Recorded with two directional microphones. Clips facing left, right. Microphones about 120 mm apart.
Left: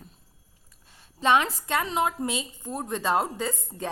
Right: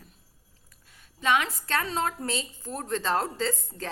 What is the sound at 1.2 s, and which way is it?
Speech, 30° left (ahead or behind).